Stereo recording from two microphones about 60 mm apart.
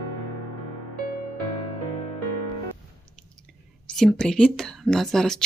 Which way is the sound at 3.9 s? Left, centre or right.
Centre.